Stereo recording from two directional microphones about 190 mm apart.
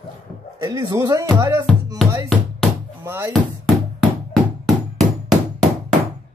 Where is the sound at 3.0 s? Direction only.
15° right (ahead or behind).